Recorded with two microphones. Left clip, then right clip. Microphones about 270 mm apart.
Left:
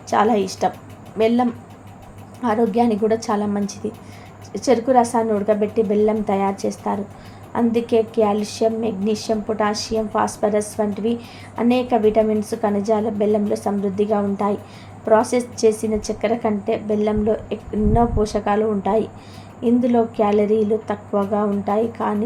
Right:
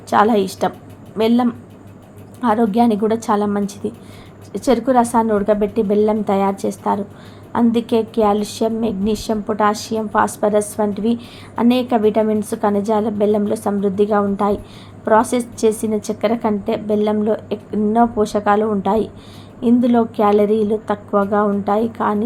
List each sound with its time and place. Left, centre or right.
0.1 s a woman's voice: centre
2.4 s a woman's voice: centre